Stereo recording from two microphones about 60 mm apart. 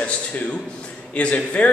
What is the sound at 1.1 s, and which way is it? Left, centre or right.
Speech, left.